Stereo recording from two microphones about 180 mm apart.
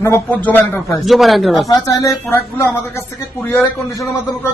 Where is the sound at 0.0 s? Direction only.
10° left (ahead or behind).